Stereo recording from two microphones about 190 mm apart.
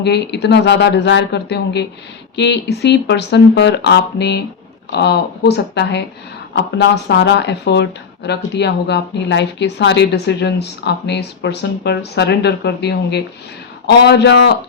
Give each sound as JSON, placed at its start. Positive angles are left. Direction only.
{"t": 0.0, "sound": "a woman's voice", "side_deg": 60}